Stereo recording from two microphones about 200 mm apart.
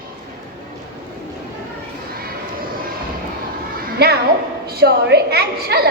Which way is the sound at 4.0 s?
55° right (ahead or behind).